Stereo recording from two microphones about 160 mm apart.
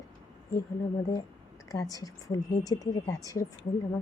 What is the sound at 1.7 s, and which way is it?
A woman's voice, 20° left (ahead or behind).